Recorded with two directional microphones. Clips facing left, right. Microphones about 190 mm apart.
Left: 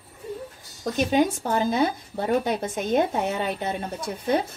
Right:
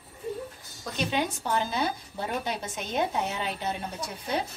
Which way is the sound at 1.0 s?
45° left (ahead or behind).